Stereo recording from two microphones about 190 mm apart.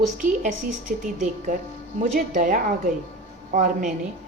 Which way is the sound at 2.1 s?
40° right (ahead or behind).